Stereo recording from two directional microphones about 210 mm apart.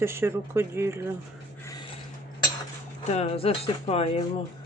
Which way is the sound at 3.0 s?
30° left (ahead or behind).